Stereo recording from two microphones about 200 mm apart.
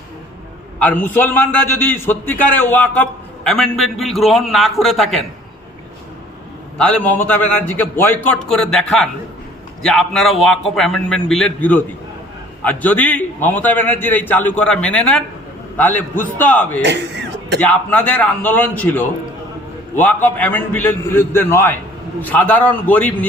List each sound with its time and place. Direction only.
0.8 s a man's voice: 10° left (ahead or behind)
6.7 s a man's voice: 5° left (ahead or behind)
16.8 s a sound: 60° right (ahead or behind)
17.6 s a man's voice: 5° left (ahead or behind)